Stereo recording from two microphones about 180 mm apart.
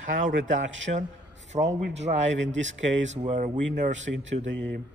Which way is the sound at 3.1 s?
40° right (ahead or behind).